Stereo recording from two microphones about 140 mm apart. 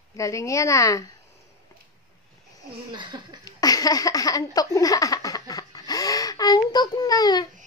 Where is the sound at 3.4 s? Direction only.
25° left (ahead or behind).